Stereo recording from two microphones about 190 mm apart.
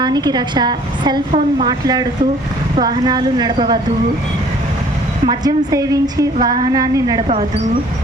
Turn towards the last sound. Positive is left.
turn(degrees=-20)  # may be behind; listen again after turning